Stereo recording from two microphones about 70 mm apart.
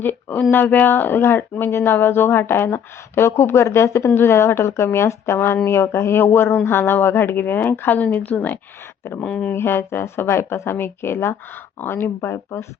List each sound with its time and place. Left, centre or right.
0.0 s speech: left
9.5 s speech: left